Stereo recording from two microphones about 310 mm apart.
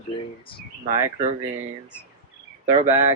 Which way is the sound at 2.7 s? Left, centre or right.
Centre.